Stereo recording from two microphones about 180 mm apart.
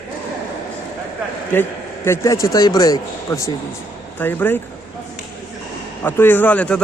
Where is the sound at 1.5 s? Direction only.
15° left (ahead or behind).